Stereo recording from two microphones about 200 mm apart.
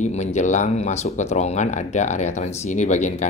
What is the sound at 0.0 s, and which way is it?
Speech, 35° left (ahead or behind).